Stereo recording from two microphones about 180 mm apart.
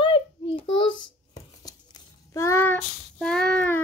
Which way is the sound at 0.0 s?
30° left (ahead or behind).